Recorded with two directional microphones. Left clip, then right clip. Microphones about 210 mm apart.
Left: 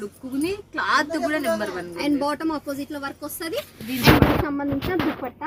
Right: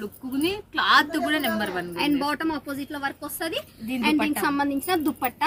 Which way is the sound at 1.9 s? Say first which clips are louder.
Left 1 dB; 5° right (ahead or behind).